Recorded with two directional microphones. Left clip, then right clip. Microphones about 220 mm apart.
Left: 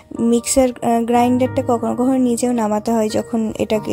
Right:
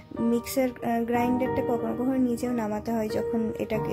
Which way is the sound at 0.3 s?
35° left (ahead or behind).